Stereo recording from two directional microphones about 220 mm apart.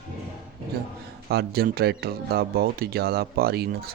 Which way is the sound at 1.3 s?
45° right (ahead or behind).